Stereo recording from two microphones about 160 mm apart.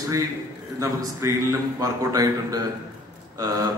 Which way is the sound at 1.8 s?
20° right (ahead or behind).